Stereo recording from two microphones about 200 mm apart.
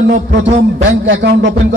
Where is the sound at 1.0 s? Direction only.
60° right (ahead or behind).